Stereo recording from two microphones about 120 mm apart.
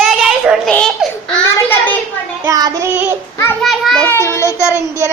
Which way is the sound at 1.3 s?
15° left (ahead or behind).